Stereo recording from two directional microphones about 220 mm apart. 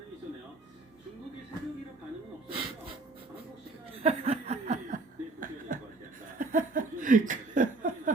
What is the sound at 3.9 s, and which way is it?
Chuckle, 30° right (ahead or behind).